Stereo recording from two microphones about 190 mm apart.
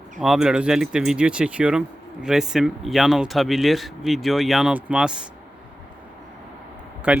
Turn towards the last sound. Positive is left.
turn(degrees=-5)  # may be behind; listen again after turning